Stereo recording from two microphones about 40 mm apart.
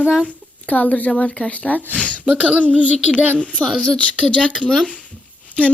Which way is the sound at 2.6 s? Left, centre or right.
Right.